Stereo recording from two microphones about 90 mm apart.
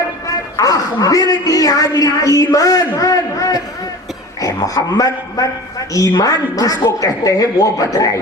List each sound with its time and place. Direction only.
0.5 s a man's voice: 45° left (ahead or behind)